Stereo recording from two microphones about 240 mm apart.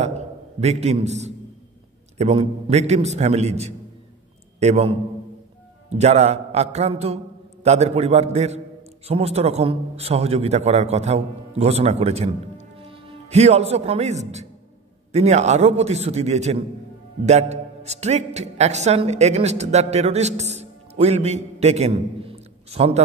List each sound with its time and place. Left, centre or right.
0.6 s a man's voice: right